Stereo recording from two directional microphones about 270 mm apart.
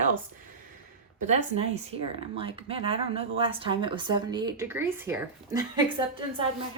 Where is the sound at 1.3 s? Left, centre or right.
Right.